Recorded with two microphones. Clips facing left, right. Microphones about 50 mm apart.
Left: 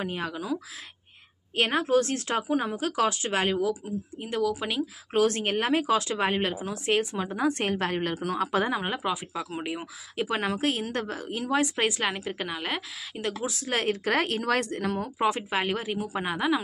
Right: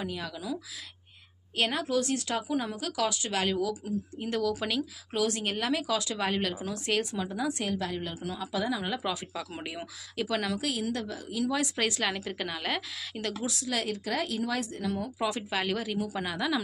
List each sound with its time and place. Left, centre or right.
0.0 s speech: left; by 4.8 s centre
5.1 s speech: left
9.0 s speech: centre
13.6 s speech: left